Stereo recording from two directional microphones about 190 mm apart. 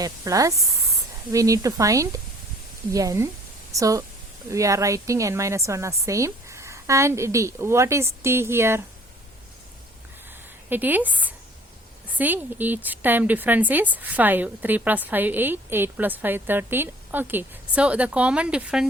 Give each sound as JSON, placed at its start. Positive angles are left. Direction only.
{"t": 0.0, "sound": "a woman's voice", "side_deg": -15}
{"t": 10.7, "sound": "a woman's voice", "side_deg": -10}